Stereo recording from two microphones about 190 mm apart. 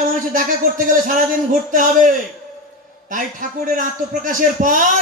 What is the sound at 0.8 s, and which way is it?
A man's voice, 45° right (ahead or behind).